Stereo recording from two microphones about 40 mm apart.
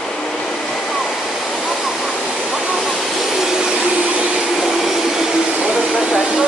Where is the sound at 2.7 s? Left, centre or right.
Centre.